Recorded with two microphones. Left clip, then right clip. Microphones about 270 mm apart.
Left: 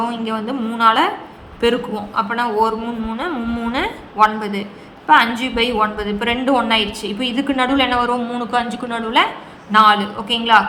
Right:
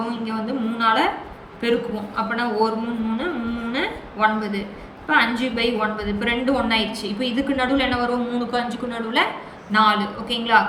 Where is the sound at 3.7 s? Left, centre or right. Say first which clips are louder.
Left 5 dB; centre.